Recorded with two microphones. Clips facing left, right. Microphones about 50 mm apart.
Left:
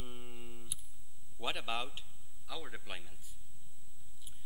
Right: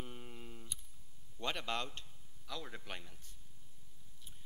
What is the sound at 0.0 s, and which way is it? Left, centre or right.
Tick, centre.